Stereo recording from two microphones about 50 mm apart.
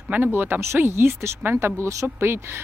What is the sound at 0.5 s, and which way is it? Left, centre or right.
Speech, right.